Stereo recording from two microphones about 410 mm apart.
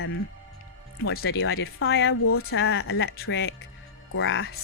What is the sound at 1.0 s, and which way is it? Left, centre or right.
A woman's voice, left.